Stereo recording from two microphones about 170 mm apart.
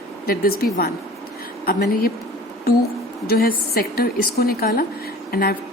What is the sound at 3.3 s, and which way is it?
Speech, 65° left (ahead or behind).